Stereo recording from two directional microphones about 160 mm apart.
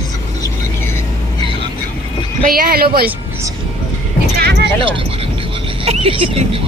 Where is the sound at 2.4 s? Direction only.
65° right (ahead or behind).